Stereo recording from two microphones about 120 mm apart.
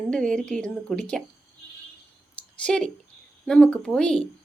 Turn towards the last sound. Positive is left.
turn(degrees=5)  # may be behind; listen again after turning